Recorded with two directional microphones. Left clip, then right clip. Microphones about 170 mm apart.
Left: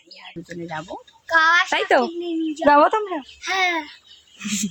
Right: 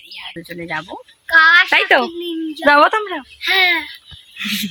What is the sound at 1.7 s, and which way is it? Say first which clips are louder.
A woman's voice: right 5 dB; 5° right (ahead or behind).